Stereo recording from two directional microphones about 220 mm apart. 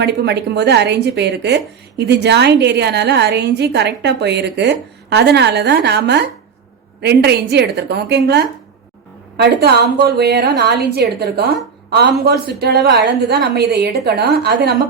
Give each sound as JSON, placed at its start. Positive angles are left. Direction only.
{"t": 0.0, "sound": "a woman's voice", "side_deg": -50}